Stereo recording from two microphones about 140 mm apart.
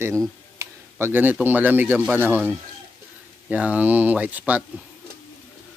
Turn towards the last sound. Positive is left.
turn(degrees=-10)  # may be behind; listen again after turning